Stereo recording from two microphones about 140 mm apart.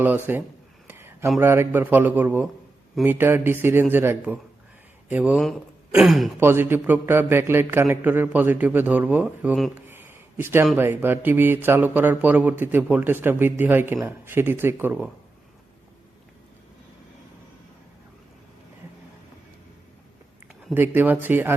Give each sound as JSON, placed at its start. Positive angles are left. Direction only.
{"t": 0.3, "sound": "speech", "side_deg": -15}
{"t": 0.9, "sound": "a sound", "side_deg": -15}
{"t": 1.4, "sound": "speech", "side_deg": -15}
{"t": 6.4, "sound": "speech", "side_deg": -15}
{"t": 9.7, "sound": "a sound", "side_deg": -15}
{"t": 10.8, "sound": "speech", "side_deg": -15}
{"t": 20.7, "sound": "speech", "side_deg": -15}